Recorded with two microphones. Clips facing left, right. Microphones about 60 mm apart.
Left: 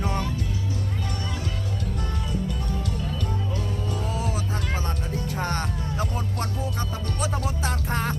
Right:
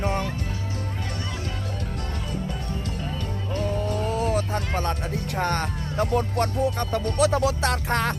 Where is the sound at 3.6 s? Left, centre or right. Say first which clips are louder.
Right 4 dB; right.